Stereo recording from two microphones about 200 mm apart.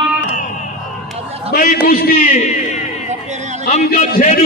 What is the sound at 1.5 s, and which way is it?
Speech, 45° left (ahead or behind).